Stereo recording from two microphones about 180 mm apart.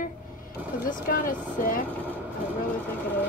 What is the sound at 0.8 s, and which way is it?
Speech, 50° left (ahead or behind).